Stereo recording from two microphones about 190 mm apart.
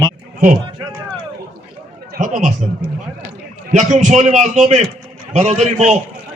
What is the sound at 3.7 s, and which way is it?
A man's voice, 40° right (ahead or behind).